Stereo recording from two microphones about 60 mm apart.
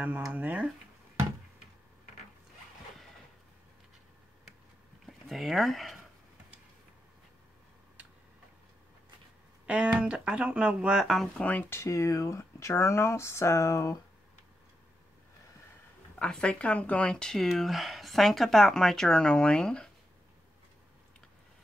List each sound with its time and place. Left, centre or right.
0.3 s speech: right
5.0 s speech: centre
9.7 s speech: centre
11.4 s speech: centre
11.7 s speech: left
16.2 s speech: centre
17.4 s speech: centre